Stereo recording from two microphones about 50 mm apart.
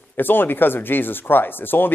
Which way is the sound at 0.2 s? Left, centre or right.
Left.